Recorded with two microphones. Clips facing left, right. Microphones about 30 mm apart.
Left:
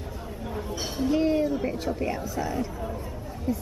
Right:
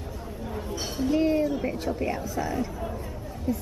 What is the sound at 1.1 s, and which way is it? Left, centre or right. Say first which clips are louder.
A woman's voice: even; centre.